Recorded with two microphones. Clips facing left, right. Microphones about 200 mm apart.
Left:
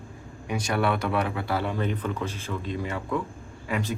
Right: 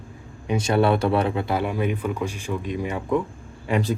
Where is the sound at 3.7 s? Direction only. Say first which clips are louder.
Right 6 dB; 35° right (ahead or behind).